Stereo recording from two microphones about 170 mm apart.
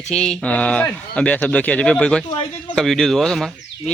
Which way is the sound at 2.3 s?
30° left (ahead or behind).